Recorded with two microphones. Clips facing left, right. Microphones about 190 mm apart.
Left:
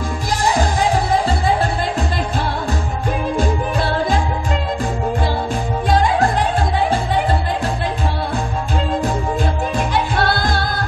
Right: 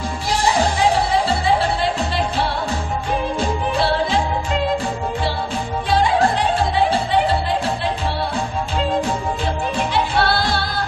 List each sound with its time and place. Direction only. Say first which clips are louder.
0.3 s music: even; 45° left (ahead or behind)
9.8 s music: even; 45° left (ahead or behind)